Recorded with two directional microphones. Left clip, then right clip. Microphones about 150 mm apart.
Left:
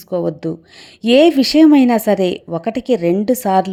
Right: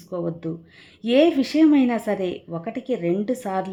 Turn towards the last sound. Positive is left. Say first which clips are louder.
# left 11 dB
turn(degrees=40)  # may be behind; listen again after turning